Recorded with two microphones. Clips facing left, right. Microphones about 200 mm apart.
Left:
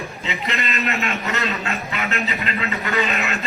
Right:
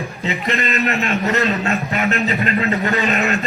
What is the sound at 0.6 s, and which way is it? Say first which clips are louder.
A man's voice: right 3 dB; 50° right (ahead or behind).